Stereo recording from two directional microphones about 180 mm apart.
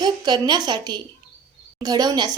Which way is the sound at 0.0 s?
25° right (ahead or behind).